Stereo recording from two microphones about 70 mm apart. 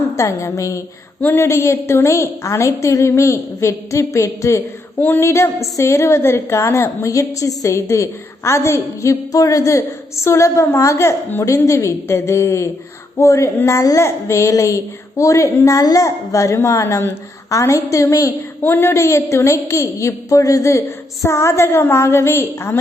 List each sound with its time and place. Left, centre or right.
0.2 s a woman's voice: left
4.9 s female singing: left
5.2 s a woman's voice: left
18.6 s a woman's voice: left